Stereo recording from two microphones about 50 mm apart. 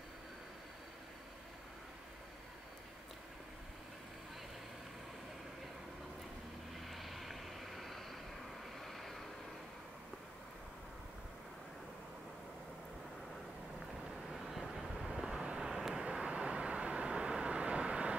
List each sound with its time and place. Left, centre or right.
6.8 s vehicle: centre
14.3 s vehicle: centre